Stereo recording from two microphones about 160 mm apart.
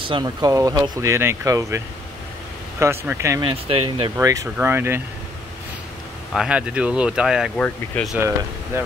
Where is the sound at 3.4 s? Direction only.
35° right (ahead or behind).